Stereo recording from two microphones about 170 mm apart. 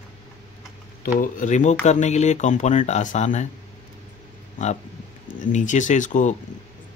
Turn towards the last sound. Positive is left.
turn(degrees=45)  # may be behind; listen again after turning